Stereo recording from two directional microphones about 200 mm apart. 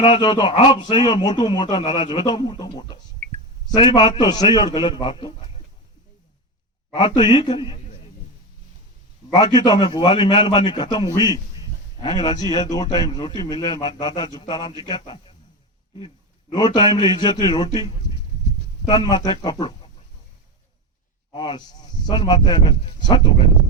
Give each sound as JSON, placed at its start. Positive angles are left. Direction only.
{"t": 0.0, "sound": "a man's voice", "side_deg": 25}
{"t": 6.9, "sound": "a man's voice", "side_deg": 25}
{"t": 9.3, "sound": "a man's voice", "side_deg": 20}
{"t": 18.9, "sound": "a man's voice", "side_deg": 20}
{"t": 21.3, "sound": "a man's voice", "side_deg": 25}